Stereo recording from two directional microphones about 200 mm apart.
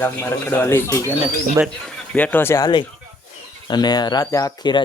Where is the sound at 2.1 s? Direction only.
10° left (ahead or behind).